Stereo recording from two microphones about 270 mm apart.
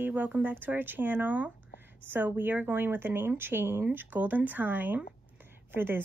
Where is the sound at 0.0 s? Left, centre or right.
Centre.